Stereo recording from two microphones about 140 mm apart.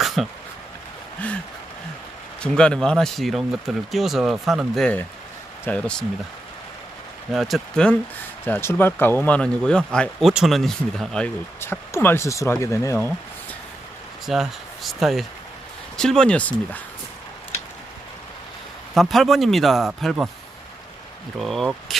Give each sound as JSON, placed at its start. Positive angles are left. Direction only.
{"t": 0.2, "sound": "speech", "side_deg": 0}
{"t": 2.4, "sound": "speech", "side_deg": 5}
{"t": 7.3, "sound": "speech", "side_deg": 0}
{"t": 8.4, "sound": "speech", "side_deg": 15}
{"t": 11.6, "sound": "speech", "side_deg": 15}
{"t": 14.3, "sound": "speech", "side_deg": 0}
{"t": 18.9, "sound": "speech", "side_deg": 0}
{"t": 21.3, "sound": "speech", "side_deg": 0}